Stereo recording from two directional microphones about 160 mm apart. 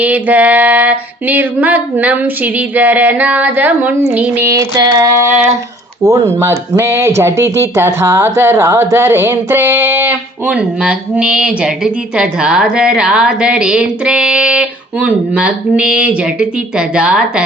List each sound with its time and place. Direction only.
0.0 s speech: 10° right (ahead or behind)